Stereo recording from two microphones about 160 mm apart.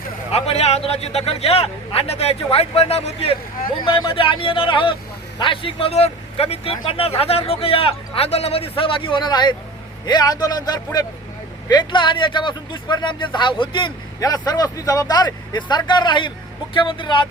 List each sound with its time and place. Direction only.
0.3 s speech: 40° left (ahead or behind)